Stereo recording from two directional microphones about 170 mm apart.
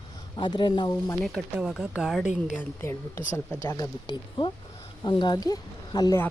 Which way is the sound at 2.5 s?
15° left (ahead or behind).